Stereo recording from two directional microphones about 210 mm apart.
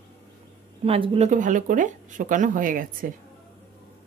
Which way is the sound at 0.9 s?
30° right (ahead or behind).